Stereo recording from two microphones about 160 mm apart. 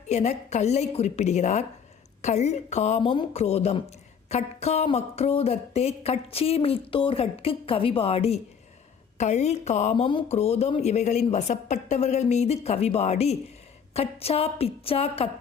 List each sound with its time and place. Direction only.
0.1 s a woman's voice: 45° left (ahead or behind)